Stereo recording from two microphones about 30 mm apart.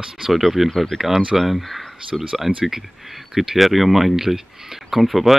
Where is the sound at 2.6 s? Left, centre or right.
Centre.